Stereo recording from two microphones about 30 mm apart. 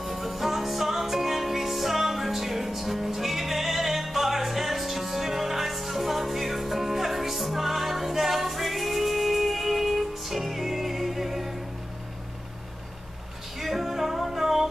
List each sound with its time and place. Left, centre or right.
0.0 s music: centre
13.6 s music: centre